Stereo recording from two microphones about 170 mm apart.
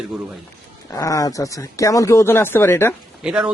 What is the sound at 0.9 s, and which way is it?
Speech, 20° left (ahead or behind).